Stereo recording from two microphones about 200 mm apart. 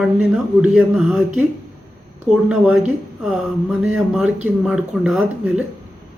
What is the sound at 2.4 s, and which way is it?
Speech, 5° right (ahead or behind).